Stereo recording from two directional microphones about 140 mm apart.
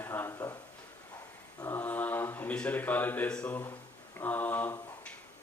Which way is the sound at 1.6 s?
15° left (ahead or behind).